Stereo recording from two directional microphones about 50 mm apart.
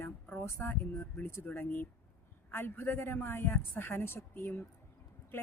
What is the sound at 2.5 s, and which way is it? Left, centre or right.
A woman's voice, left.